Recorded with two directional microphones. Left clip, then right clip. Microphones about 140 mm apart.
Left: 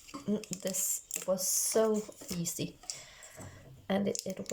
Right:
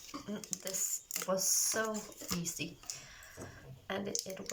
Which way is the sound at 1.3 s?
35° left (ahead or behind).